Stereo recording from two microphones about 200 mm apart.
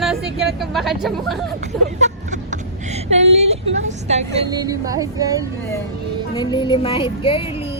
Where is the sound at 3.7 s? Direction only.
70° right (ahead or behind).